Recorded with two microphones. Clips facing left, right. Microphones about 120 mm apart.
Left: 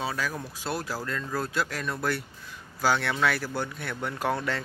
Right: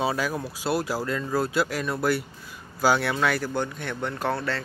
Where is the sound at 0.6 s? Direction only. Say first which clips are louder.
Right 6 dB; 10° right (ahead or behind).